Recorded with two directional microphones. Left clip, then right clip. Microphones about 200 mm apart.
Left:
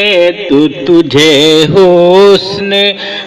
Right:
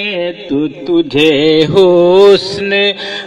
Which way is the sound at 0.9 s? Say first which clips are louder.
Left 3 dB; 20° right (ahead or behind).